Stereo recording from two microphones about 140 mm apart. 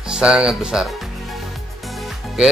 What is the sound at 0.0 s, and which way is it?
Speech, 5° right (ahead or behind).